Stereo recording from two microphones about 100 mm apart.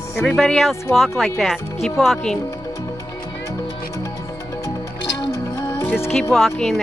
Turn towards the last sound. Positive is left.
turn(degrees=0)  # may be behind; listen again after turning